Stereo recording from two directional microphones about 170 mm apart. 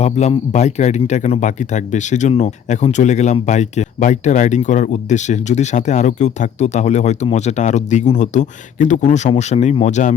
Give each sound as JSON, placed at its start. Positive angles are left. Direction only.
{"t": 0.0, "sound": "speech", "side_deg": 40}